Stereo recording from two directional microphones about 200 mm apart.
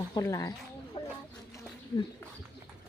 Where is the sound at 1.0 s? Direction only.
25° left (ahead or behind).